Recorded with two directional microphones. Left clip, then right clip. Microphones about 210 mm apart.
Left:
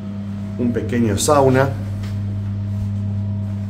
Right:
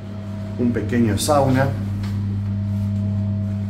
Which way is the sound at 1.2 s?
30° left (ahead or behind).